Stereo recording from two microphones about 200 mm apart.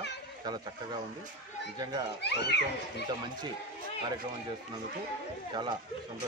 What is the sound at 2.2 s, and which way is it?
Speech, 60° left (ahead or behind).